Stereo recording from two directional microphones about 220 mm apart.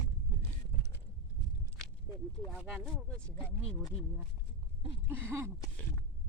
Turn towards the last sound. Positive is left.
turn(degrees=-10)  # may be behind; listen again after turning